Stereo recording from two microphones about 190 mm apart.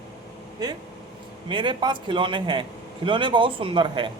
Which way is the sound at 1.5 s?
25° right (ahead or behind).